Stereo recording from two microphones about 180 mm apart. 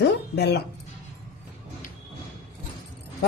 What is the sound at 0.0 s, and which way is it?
Music, 65° left (ahead or behind).